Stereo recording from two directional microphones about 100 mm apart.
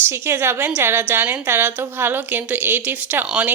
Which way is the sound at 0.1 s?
25° right (ahead or behind).